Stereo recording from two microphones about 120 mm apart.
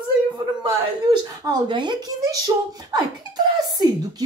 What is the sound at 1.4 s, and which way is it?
Speech, 40° right (ahead or behind).